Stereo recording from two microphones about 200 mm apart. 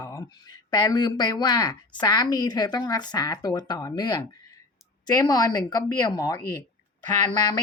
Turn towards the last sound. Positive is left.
turn(degrees=20)  # may be behind; listen again after turning